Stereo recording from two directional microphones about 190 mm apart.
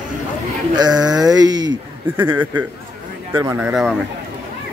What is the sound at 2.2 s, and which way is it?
Speech, 10° right (ahead or behind).